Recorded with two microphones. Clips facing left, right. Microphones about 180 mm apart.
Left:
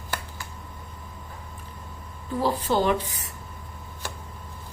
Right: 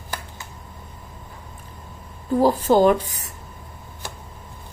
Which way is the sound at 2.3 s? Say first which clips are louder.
Right 7 dB; 45° right (ahead or behind).